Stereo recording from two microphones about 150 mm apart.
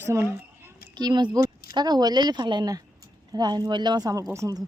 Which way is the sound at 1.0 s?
30° right (ahead or behind).